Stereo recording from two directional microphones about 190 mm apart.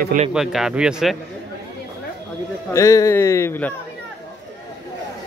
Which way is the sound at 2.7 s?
15° left (ahead or behind).